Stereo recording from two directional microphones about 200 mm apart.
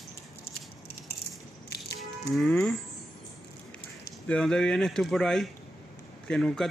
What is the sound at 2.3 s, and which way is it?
Speech, 5° left (ahead or behind).